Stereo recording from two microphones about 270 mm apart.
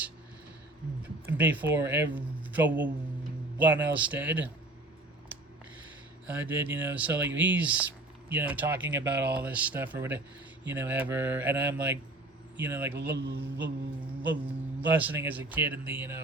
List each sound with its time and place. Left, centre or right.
1.0 s speech: centre
3.9 s speech: centre
6.2 s speech: centre
13.1 s mantra: right
14.2 s speech: centre